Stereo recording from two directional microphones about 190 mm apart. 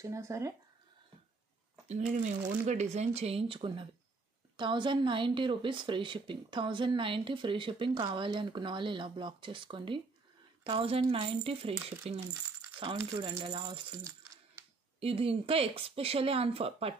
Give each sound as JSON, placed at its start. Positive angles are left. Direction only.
{"t": 0.0, "sound": "speech", "side_deg": -15}
{"t": 2.6, "sound": "a woman's voice", "side_deg": -35}
{"t": 12.9, "sound": "a woman's voice", "side_deg": -20}
{"t": 15.0, "sound": "speech", "side_deg": -30}